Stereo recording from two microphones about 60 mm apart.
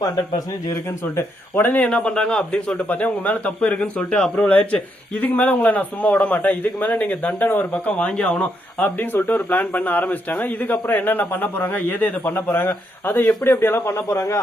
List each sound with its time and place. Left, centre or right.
0.0 s speech: left
1.5 s speech: left
1.8 s speech: left
2.9 s speech: left
7.9 s speech: centre
8.8 s speech: left